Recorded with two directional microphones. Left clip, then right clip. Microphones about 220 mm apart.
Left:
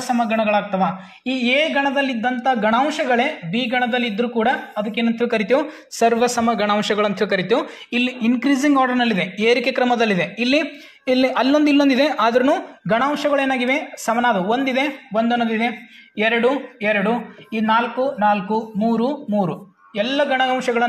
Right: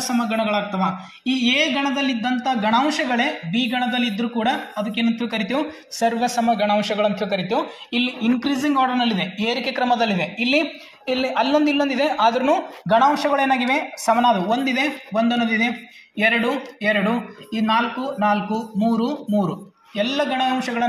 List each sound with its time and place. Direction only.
0.0 s speech: 35° left (ahead or behind)